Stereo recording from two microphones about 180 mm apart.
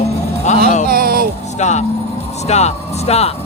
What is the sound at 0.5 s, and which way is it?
Music, 40° left (ahead or behind).